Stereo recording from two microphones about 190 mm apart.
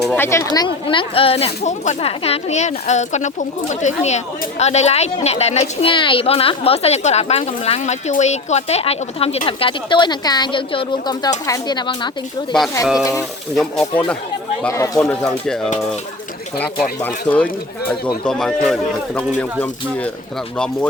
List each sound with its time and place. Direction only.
0.0 s speech: 10° left (ahead or behind)
13.6 s speech: 5° left (ahead or behind)
14.7 s speech: 15° left (ahead or behind)
15.0 s speech: 5° left (ahead or behind)